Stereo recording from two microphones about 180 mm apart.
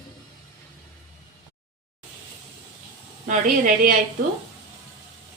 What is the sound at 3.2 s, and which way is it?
Speech, 45° right (ahead or behind).